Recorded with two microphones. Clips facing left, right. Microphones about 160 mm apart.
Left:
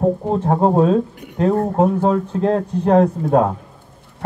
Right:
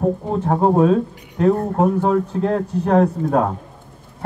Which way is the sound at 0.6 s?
30° left (ahead or behind).